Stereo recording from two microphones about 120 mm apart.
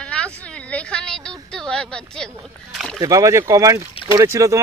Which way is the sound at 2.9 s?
30° right (ahead or behind).